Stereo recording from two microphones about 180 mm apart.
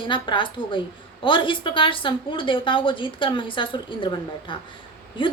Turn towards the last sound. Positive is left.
turn(degrees=30)  # may be behind; listen again after turning